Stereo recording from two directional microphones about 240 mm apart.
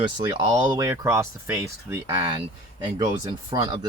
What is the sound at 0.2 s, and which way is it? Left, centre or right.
Speech, centre.